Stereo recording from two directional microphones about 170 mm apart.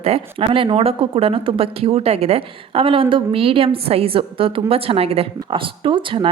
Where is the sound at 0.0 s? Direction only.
35° right (ahead or behind).